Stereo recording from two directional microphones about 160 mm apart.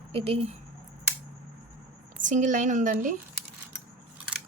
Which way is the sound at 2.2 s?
50° right (ahead or behind).